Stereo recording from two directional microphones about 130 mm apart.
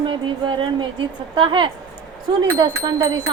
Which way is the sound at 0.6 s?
40° right (ahead or behind).